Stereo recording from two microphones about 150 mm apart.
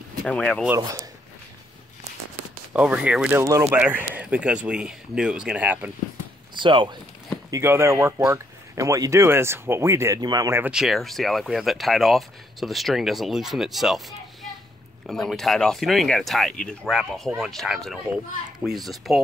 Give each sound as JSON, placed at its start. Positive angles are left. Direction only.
{"t": 0.2, "sound": "speech", "side_deg": 5}
{"t": 0.7, "sound": "speech", "side_deg": -20}
{"t": 2.7, "sound": "speech", "side_deg": -10}
{"t": 6.5, "sound": "speech", "side_deg": -35}
{"t": 7.5, "sound": "speech", "side_deg": -15}
{"t": 10.6, "sound": "speech", "side_deg": -5}
{"t": 15.0, "sound": "speech", "side_deg": 0}